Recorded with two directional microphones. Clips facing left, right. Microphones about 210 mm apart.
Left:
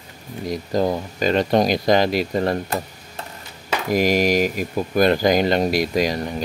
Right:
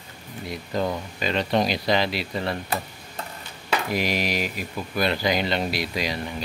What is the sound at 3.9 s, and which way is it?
Speech, 45° left (ahead or behind).